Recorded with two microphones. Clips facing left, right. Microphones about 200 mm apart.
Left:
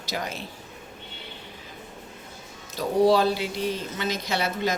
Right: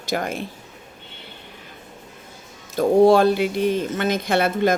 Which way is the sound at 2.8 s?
50° right (ahead or behind).